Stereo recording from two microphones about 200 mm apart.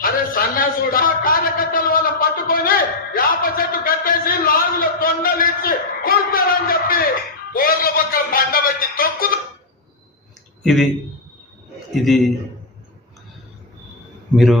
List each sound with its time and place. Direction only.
0.0 s a sound: 45° left (ahead or behind)
10.6 s speech: centre (ahead or behind)
12.0 s a man's voice: centre (ahead or behind)
14.3 s a man's voice: centre (ahead or behind)